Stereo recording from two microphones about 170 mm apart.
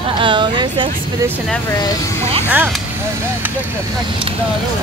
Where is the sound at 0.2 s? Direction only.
30° right (ahead or behind).